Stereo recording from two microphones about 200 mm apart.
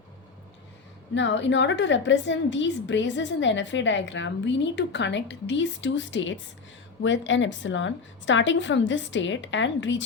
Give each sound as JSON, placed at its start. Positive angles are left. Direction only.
{"t": 1.1, "sound": "a woman's voice", "side_deg": 65}